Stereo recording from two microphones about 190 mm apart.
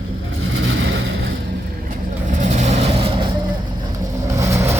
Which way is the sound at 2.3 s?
35° right (ahead or behind).